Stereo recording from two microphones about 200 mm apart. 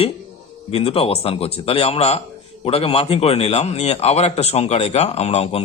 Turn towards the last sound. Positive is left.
turn(degrees=30)  # may be behind; listen again after turning